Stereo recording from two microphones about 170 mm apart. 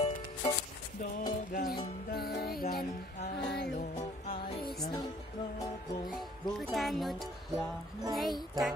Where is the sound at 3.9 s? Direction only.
35° left (ahead or behind).